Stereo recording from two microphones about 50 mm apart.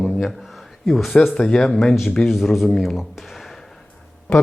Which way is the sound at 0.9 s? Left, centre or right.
Centre.